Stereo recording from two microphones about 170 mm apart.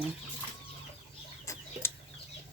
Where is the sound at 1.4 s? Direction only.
15° left (ahead or behind).